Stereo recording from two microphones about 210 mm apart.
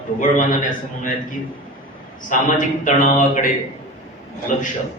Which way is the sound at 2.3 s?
40° left (ahead or behind).